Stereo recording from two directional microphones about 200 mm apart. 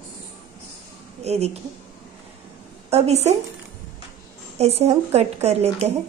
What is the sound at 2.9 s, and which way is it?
Speech, 30° right (ahead or behind).